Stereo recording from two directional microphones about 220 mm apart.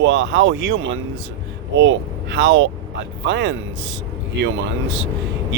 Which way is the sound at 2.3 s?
55° right (ahead or behind).